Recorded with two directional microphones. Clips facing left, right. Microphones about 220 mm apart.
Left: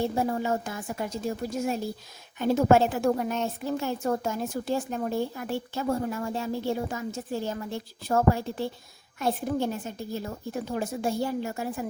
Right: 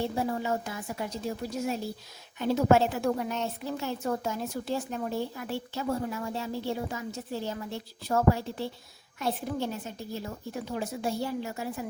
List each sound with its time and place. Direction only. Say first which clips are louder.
0.2 s a woman's voice: left 3 dB; 50° left (ahead or behind)